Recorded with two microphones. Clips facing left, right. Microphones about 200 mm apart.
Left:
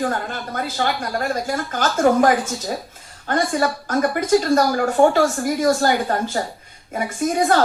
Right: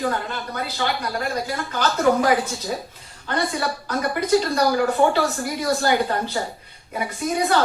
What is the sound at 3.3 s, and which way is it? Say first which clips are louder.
A woman's voice: left 4 dB; 50° left (ahead or behind).